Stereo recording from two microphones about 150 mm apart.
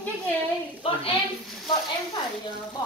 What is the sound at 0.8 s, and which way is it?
Speech, 40° left (ahead or behind).